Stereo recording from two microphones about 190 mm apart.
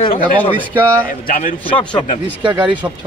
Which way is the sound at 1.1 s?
45° left (ahead or behind).